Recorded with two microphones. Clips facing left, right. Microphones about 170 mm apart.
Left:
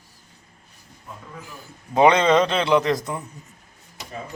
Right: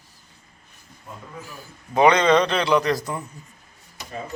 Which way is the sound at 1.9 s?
25° left (ahead or behind).